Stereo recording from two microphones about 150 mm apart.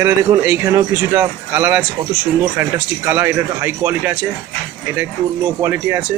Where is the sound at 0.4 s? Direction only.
15° right (ahead or behind).